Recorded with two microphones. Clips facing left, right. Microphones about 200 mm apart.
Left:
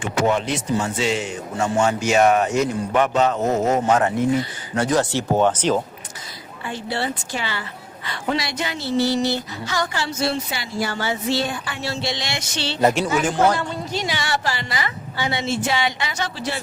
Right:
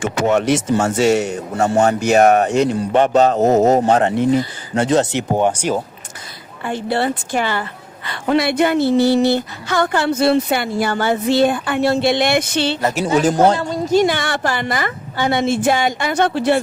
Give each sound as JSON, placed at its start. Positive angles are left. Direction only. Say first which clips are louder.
{"t": 0.4, "sound": "speech", "louder": "right 7 dB", "side_deg": -80}
{"t": 1.3, "sound": "a man's voice", "louder": "right 5 dB", "side_deg": -40}
{"t": 2.0, "sound": "a woman's voice", "louder": "right 4 dB", "side_deg": -50}
{"t": 2.5, "sound": "a man's voice", "louder": "right 5 dB", "side_deg": -30}
{"t": 6.7, "sound": "a woman's voice", "louder": "right 7 dB", "side_deg": -55}
{"t": 13.1, "sound": "a woman's voice", "louder": "right 5 dB", "side_deg": -35}